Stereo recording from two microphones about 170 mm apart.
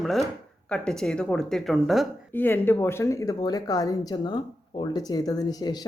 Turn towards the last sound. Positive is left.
turn(degrees=25)  # may be behind; listen again after turning